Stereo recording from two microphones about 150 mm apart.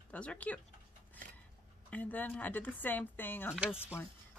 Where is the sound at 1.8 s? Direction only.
10° left (ahead or behind).